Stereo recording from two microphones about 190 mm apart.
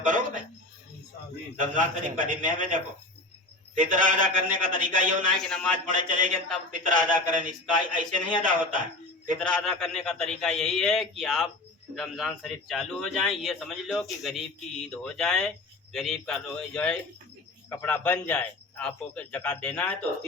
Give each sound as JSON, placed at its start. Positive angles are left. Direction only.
{"t": 0.0, "sound": "a sound", "side_deg": -45}
{"t": 1.5, "sound": "a man's voice", "side_deg": -45}
{"t": 9.4, "sound": "a man's voice", "side_deg": 5}